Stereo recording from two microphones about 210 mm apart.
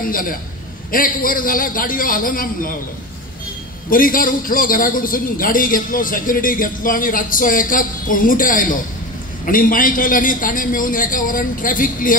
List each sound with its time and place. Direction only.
0.0 s a man's voice: 40° left (ahead or behind)
3.9 s a man's voice: 40° left (ahead or behind)